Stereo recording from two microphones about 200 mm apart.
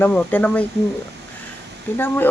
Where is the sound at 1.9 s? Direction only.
10° left (ahead or behind).